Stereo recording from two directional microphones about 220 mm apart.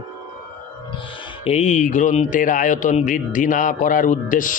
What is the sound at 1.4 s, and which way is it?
Speech, 30° left (ahead or behind).